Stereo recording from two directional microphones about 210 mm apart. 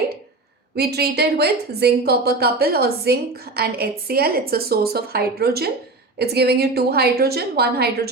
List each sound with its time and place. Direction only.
0.8 s a woman's voice: 50° right (ahead or behind)